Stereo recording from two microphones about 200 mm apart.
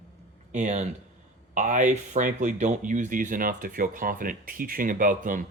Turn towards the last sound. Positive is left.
turn(degrees=-40)  # may be behind; listen again after turning